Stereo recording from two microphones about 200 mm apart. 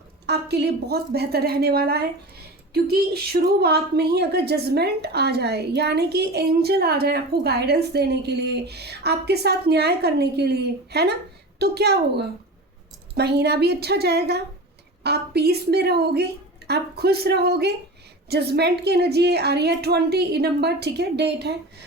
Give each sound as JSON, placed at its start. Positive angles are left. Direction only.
{"t": 0.3, "sound": "a woman's voice", "side_deg": -55}